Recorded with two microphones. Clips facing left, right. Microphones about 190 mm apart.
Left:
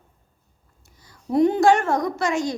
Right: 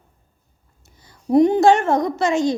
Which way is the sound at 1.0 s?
25° right (ahead or behind).